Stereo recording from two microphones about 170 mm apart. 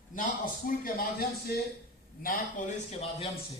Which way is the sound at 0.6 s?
60° left (ahead or behind).